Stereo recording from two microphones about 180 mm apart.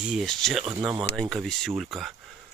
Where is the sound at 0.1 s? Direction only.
Centre (ahead or behind).